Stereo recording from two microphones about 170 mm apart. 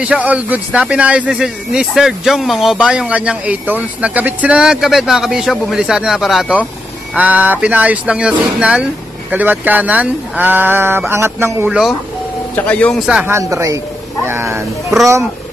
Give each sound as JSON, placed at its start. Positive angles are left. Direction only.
{"t": 0.0, "sound": "speech", "side_deg": -5}
{"t": 12.5, "sound": "speech", "side_deg": 10}
{"t": 13.2, "sound": "speech", "side_deg": -15}